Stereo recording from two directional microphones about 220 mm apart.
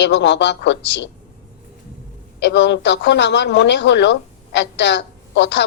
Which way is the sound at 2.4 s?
55° left (ahead or behind).